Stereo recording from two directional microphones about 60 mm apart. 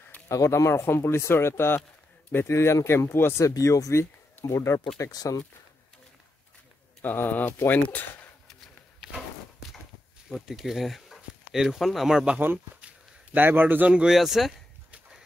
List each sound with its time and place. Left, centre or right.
0.3 s speech: left
3.4 s speech: left
5.1 s speech: left
7.0 s speech: left
9.0 s walk: centre
10.3 s speech: centre
12.8 s a sound: right
14.0 s speech: centre